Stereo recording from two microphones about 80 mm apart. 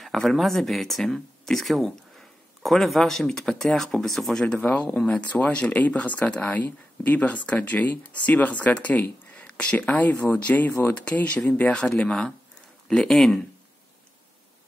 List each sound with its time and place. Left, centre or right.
0.0 s speech: centre
4.6 s speech: centre